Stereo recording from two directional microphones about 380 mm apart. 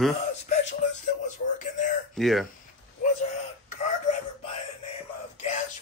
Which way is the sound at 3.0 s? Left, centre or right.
Centre.